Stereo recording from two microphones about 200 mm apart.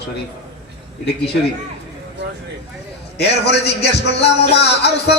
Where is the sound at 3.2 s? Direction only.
55° left (ahead or behind).